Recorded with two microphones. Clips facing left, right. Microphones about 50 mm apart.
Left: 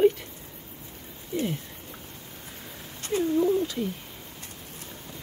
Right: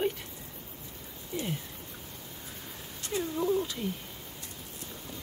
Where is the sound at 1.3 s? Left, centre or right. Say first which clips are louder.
Left 7 dB; centre.